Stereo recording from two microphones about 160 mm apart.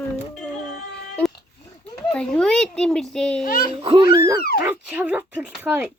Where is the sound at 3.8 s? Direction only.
35° right (ahead or behind).